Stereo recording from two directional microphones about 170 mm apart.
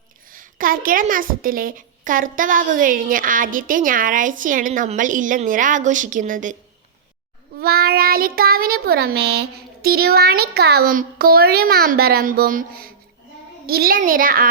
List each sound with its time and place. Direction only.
0.3 s a woman's voice: 55° right (ahead or behind)
7.6 s child singing: 65° right (ahead or behind)